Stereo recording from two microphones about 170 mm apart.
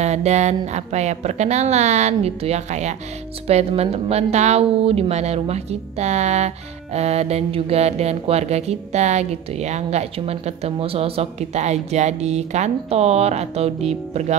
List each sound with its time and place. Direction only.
0.0 s speech: 40° right (ahead or behind)